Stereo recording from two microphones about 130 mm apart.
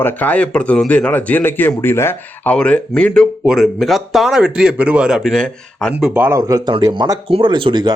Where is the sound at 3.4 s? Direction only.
5° right (ahead or behind).